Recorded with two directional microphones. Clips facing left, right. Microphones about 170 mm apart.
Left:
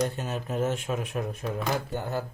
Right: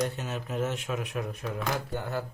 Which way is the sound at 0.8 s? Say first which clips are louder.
Left 2 dB; 30° left (ahead or behind).